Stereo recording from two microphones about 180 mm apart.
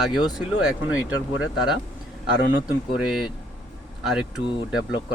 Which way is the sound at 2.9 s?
Centre (ahead or behind).